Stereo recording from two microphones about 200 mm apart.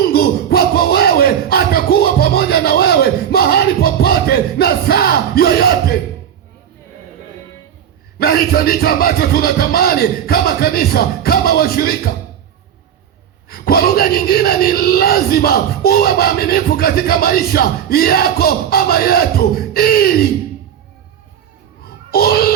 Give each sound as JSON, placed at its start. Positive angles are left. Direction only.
{"t": 0.0, "sound": "a sound", "side_deg": 50}
{"t": 8.2, "sound": "speech", "side_deg": 50}
{"t": 13.5, "sound": "speech", "side_deg": 50}
{"t": 21.8, "sound": "children playing", "side_deg": 50}